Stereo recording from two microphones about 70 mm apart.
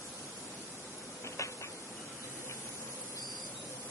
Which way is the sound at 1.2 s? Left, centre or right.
Left.